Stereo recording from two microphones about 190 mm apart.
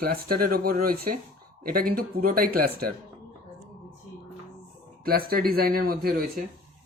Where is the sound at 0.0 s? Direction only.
50° right (ahead or behind).